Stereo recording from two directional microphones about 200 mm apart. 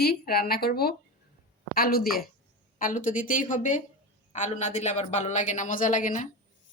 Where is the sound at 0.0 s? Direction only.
50° left (ahead or behind).